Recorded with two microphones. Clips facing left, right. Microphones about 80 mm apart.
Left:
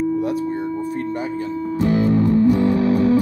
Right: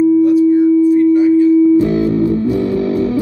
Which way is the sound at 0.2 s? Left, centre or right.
Left.